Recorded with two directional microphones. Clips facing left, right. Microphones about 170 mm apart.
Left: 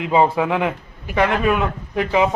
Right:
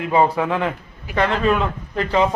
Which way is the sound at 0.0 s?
15° left (ahead or behind).